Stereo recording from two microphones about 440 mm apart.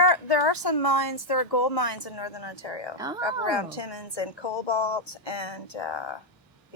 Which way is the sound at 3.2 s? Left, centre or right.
Left.